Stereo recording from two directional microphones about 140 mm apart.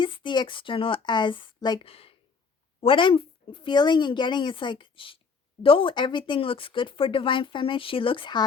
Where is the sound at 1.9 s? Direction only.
45° left (ahead or behind).